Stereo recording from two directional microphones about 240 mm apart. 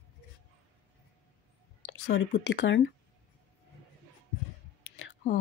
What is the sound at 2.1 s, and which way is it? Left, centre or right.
Speech, left.